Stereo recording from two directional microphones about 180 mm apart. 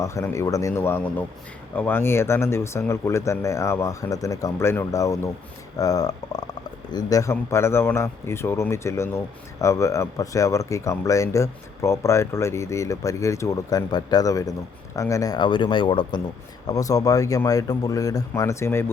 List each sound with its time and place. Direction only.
0.0 s speech: 15° left (ahead or behind)